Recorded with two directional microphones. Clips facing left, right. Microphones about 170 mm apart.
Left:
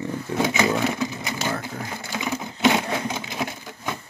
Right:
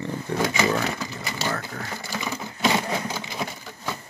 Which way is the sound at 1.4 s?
15° left (ahead or behind).